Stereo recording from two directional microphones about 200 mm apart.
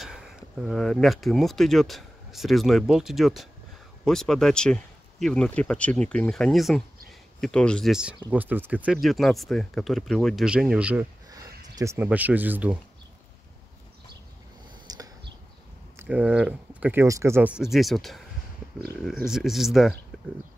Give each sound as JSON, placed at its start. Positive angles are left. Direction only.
{"t": 0.0, "sound": "a man's voice", "side_deg": 0}
{"t": 11.2, "sound": "speech", "side_deg": -20}
{"t": 14.9, "sound": "a sound", "side_deg": -20}
{"t": 16.0, "sound": "speech", "side_deg": -10}